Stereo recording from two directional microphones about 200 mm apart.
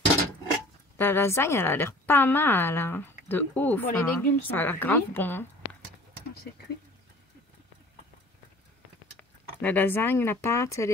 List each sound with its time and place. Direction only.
0.9 s speech: 10° left (ahead or behind)
9.2 s a sound: 5° left (ahead or behind)
9.6 s speech: 10° left (ahead or behind)